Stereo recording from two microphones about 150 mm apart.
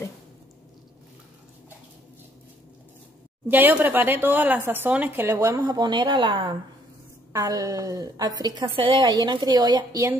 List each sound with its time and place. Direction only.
3.4 s speech: 15° right (ahead or behind); by 6.5 s 30° right (ahead or behind)
7.3 s a woman's voice: 20° right (ahead or behind)